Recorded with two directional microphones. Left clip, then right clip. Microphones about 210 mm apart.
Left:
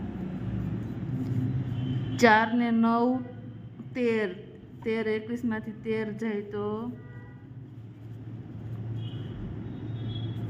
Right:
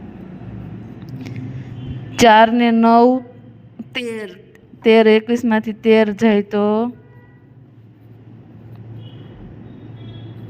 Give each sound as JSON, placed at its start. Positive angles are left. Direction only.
{"t": 2.1, "sound": "a woman's voice", "side_deg": -40}
{"t": 4.0, "sound": "a woman's voice", "side_deg": 0}
{"t": 4.8, "sound": "a woman's voice", "side_deg": -40}